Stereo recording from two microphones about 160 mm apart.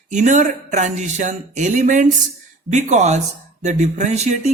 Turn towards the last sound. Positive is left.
turn(degrees=-45)  # may be behind; listen again after turning